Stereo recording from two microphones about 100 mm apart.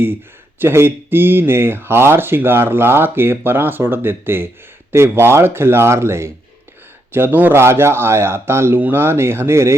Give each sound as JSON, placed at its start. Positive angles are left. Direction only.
{"t": 0.6, "sound": "speech", "side_deg": -25}